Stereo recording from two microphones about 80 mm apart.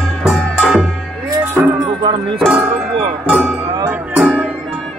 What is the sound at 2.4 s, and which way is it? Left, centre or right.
Music, centre.